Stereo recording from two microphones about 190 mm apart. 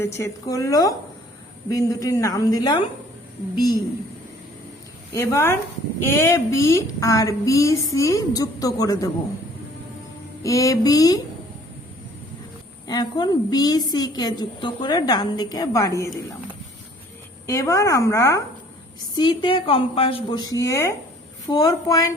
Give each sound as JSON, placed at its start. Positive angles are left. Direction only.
{"t": 0.0, "sound": "a woman's voice", "side_deg": 15}
{"t": 5.1, "sound": "a woman's voice", "side_deg": 15}
{"t": 10.4, "sound": "a woman's voice", "side_deg": 15}
{"t": 12.9, "sound": "a woman's voice", "side_deg": 20}
{"t": 17.4, "sound": "a woman's voice", "side_deg": 15}